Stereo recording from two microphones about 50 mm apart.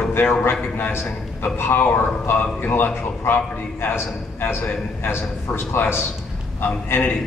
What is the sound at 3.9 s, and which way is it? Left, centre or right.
Speech, left.